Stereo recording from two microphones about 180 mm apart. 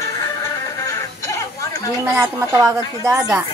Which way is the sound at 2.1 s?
15° right (ahead or behind).